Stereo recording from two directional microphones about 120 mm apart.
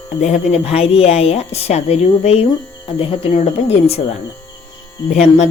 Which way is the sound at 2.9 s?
50° left (ahead or behind).